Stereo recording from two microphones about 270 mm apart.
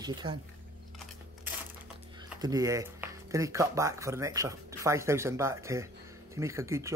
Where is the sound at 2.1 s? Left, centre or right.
Centre.